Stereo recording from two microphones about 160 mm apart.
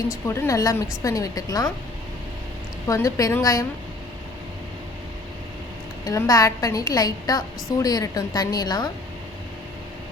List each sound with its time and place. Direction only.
0.1 s a woman's voice: 20° left (ahead or behind)
2.8 s a woman's voice: 20° left (ahead or behind)
6.1 s a woman's voice: 20° left (ahead or behind)